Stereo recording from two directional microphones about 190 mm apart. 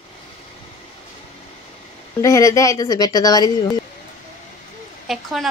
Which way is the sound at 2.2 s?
15° left (ahead or behind).